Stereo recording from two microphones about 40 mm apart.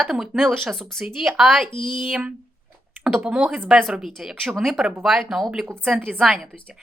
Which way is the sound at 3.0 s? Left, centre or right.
Right.